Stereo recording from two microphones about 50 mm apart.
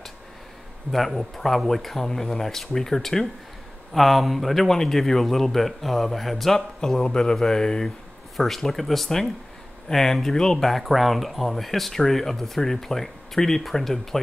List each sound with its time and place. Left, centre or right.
0.9 s speech: centre